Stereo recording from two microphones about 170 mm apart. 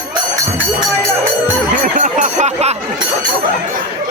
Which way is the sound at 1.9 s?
50° right (ahead or behind).